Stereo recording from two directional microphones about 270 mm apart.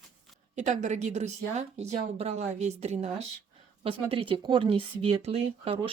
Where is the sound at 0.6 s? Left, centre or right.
Right.